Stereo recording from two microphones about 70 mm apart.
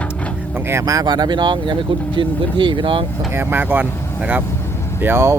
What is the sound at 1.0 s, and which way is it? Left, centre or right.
Speech, right.